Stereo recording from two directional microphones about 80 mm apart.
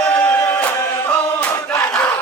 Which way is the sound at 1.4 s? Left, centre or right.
Centre.